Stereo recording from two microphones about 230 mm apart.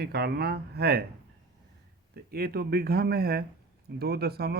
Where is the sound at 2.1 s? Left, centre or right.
Right.